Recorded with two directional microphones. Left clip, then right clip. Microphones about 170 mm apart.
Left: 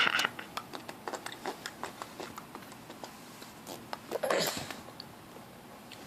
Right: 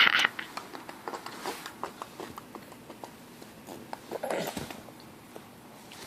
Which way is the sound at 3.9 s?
15° left (ahead or behind).